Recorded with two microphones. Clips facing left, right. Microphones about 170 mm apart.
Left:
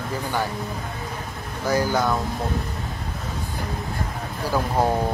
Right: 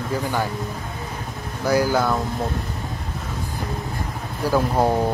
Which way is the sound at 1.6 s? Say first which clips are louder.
Right 2 dB; 10° right (ahead or behind).